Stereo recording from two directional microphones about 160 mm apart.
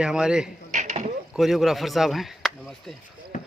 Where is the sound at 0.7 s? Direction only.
50° right (ahead or behind).